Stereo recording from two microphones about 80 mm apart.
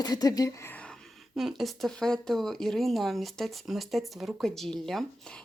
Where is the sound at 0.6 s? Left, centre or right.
Centre.